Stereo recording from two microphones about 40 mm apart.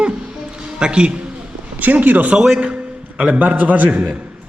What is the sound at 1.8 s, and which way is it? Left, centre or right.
A man's voice, right.